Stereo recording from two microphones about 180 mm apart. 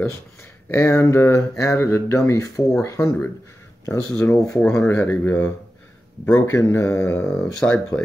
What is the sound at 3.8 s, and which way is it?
Speech, 15° left (ahead or behind).